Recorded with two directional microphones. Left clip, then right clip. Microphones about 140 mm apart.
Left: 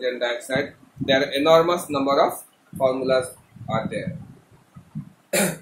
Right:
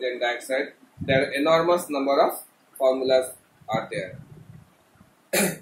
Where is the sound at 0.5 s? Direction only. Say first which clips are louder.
Left 2 dB; 35° left (ahead or behind).